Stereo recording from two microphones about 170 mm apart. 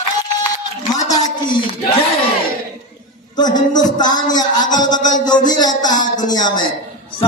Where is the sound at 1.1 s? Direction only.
25° left (ahead or behind).